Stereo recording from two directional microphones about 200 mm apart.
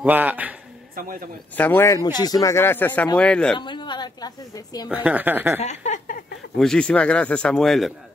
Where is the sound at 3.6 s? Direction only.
25° left (ahead or behind).